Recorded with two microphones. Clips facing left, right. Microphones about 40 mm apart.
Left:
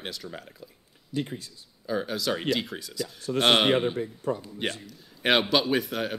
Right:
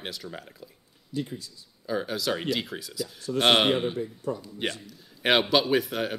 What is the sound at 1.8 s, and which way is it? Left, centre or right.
Speech, centre.